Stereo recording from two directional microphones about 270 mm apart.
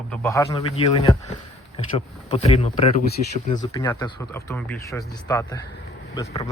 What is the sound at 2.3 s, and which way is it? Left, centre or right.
Speech, left.